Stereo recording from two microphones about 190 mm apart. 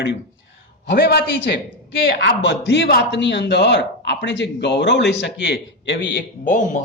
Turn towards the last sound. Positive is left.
turn(degrees=40)  # may be behind; listen again after turning